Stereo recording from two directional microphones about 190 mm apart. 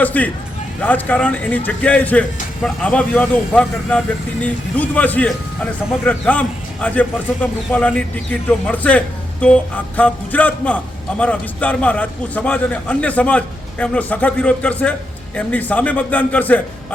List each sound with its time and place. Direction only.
0.0 s a man's voice: 10° left (ahead or behind)